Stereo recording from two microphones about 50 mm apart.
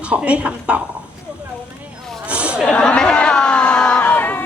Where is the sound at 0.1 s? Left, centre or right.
Right.